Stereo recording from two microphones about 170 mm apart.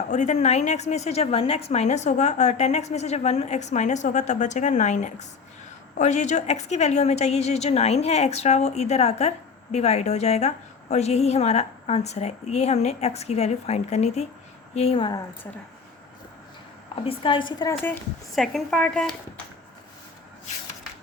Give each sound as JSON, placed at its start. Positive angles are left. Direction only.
{"t": 0.1, "sound": "a woman's voice", "side_deg": 45}
{"t": 16.9, "sound": "a woman's voice", "side_deg": 30}
{"t": 17.7, "sound": "speech", "side_deg": 15}
{"t": 18.3, "sound": "a woman's voice", "side_deg": 0}